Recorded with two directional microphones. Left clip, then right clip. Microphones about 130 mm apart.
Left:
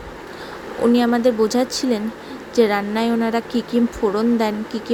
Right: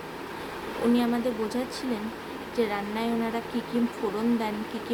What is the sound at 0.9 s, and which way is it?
Speech, 60° left (ahead or behind).